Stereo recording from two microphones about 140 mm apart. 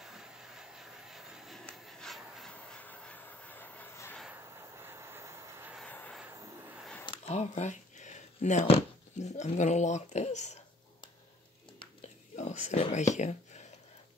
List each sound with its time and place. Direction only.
0.0 s vehicle: 5° right (ahead or behind)
2.5 s train: 10° left (ahead or behind)
4.3 s vehicle: 20° right (ahead or behind)
5.9 s vehicle: 10° left (ahead or behind)
6.2 s vehicle: 20° right (ahead or behind)
7.2 s a sound: 55° left (ahead or behind)
9.2 s speech: 55° left (ahead or behind)
12.0 s whispering: 55° left (ahead or behind)
12.9 s speech: 55° left (ahead or behind)